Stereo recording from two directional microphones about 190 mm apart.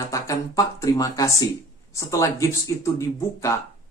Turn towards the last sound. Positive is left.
turn(degrees=15)  # may be behind; listen again after turning